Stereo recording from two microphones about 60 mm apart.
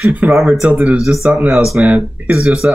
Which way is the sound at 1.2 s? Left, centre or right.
Right.